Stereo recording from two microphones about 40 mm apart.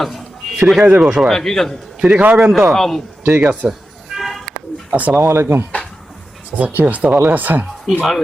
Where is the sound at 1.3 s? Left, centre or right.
Centre.